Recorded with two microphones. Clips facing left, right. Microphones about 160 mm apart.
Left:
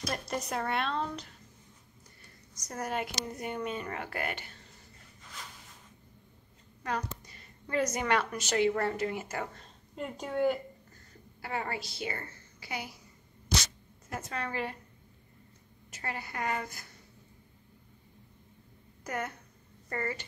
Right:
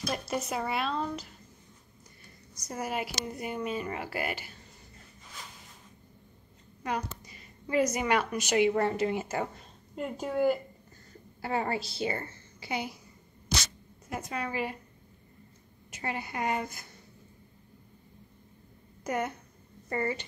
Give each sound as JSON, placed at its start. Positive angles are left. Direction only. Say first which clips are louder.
{"t": 0.1, "sound": "speech", "louder": "right 2 dB", "side_deg": -5}
{"t": 2.5, "sound": "a woman's voice", "louder": "right 1 dB", "side_deg": -10}
{"t": 6.8, "sound": "a woman's voice", "louder": "right 1 dB", "side_deg": -10}
{"t": 9.9, "sound": "speech", "louder": "right 2 dB", "side_deg": -5}
{"t": 11.4, "sound": "a woman's voice", "louder": "right 5 dB", "side_deg": -30}
{"t": 14.0, "sound": "a woman's voice", "louder": "right 2 dB", "side_deg": -15}
{"t": 15.9, "sound": "a woman's voice", "louder": "right 4 dB", "side_deg": -20}
{"t": 19.0, "sound": "a woman's voice", "louder": "right 5 dB", "side_deg": -20}